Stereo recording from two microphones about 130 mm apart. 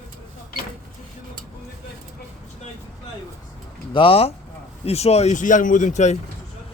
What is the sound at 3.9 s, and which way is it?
Speech, 45° left (ahead or behind).